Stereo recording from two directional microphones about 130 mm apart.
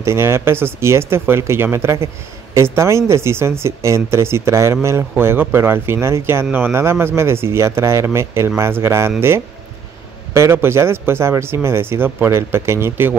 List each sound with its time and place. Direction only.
0.0 s speech: 20° right (ahead or behind)
10.3 s speech: 20° right (ahead or behind)